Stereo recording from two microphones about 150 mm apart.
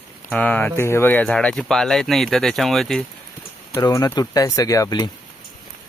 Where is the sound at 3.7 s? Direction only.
25° left (ahead or behind).